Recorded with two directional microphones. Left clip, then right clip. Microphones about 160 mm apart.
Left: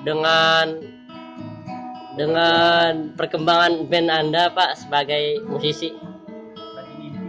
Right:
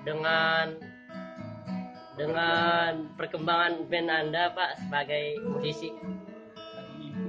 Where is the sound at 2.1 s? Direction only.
55° left (ahead or behind).